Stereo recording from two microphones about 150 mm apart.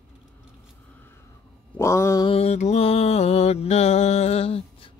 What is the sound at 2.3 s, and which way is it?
Mantra, 45° left (ahead or behind).